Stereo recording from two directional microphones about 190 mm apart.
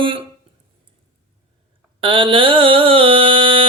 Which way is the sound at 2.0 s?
25° right (ahead or behind).